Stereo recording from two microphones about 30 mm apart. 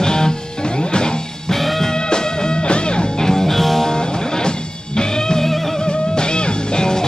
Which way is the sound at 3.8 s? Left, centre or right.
Left.